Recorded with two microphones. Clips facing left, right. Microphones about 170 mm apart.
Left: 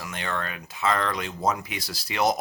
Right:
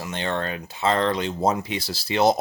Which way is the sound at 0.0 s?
30° right (ahead or behind).